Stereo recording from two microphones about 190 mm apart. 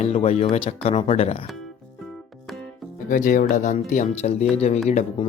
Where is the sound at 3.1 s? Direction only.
45° left (ahead or behind).